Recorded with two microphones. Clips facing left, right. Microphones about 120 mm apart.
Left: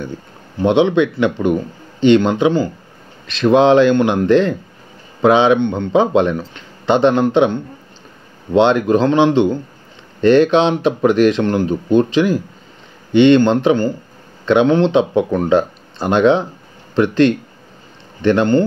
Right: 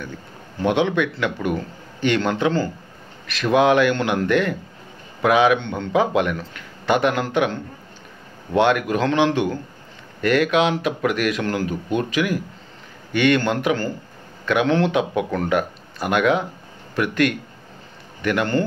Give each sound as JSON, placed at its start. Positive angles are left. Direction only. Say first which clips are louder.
{"t": 0.6, "sound": "speech", "louder": "left 7 dB", "side_deg": 20}
{"t": 8.5, "sound": "speech", "louder": "left 6 dB", "side_deg": 25}